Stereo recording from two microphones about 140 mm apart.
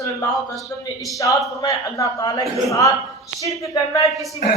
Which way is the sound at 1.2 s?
25° left (ahead or behind).